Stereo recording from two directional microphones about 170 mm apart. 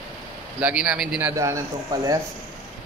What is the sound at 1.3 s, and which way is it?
Speech, 20° right (ahead or behind).